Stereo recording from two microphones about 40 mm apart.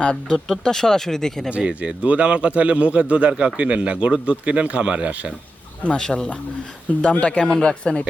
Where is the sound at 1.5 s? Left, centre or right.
Right.